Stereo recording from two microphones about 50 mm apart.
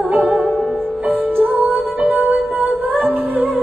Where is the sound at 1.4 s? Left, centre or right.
Right.